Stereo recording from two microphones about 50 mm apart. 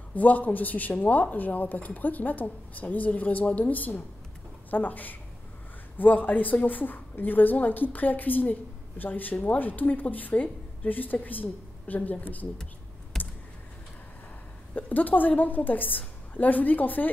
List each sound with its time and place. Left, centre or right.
0.1 s a woman's voice: left
13.1 s computer keyboard: centre
14.8 s a woman's voice: left